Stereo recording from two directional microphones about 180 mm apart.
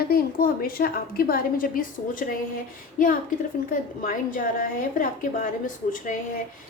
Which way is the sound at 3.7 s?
50° left (ahead or behind).